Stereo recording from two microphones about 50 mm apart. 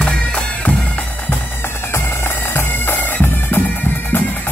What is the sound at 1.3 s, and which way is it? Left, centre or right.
Bagpipes, left.